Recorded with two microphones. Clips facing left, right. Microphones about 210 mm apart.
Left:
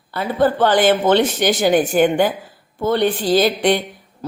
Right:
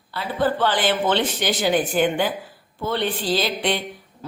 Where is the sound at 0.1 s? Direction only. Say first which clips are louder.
Left 5 dB; 45° left (ahead or behind).